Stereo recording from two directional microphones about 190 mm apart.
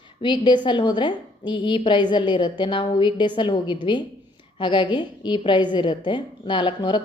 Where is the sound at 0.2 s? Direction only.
25° left (ahead or behind).